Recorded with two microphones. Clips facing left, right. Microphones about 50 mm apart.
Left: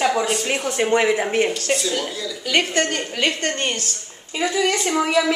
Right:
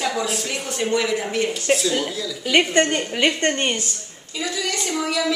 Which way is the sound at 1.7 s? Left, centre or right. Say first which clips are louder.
Right 2 dB; centre.